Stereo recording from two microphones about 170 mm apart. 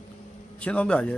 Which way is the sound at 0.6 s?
5° left (ahead or behind).